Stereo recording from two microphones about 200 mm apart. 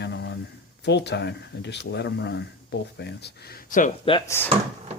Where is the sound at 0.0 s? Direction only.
60° left (ahead or behind).